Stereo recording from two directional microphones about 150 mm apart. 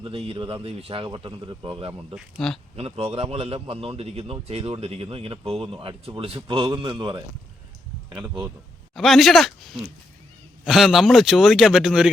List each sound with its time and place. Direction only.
0.0 s a man's voice: 40° right (ahead or behind)
2.1 s a man's voice: centre (ahead or behind)
2.7 s a man's voice: 40° right (ahead or behind)
9.0 s a man's voice: centre (ahead or behind)